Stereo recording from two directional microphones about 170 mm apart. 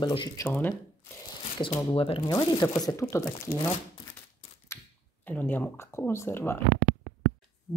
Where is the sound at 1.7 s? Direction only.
35° left (ahead or behind).